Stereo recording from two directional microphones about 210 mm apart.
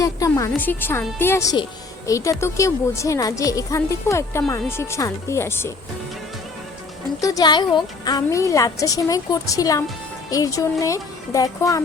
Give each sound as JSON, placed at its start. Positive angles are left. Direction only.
{"t": 0.0, "sound": "a woman's voice", "side_deg": 15}
{"t": 7.2, "sound": "a woman's voice", "side_deg": 15}